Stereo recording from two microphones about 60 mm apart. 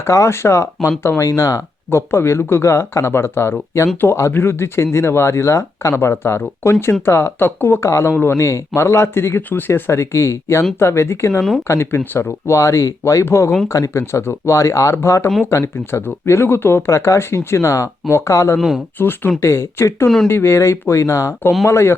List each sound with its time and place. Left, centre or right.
0.0 s speech: left
1.9 s speech: left
7.9 s speech: left
9.5 s speech: left
12.5 s speech: left
13.2 s speech: left
13.7 s speech: left
14.0 s speech: left
14.5 s speech: left
16.9 s speech: left
18.5 s speech: centre
18.9 s speech: left
19.4 s speech: left